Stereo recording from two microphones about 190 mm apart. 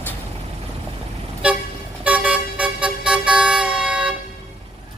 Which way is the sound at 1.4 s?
5° right (ahead or behind).